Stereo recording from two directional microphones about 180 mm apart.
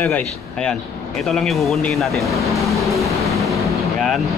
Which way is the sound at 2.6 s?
Centre (ahead or behind).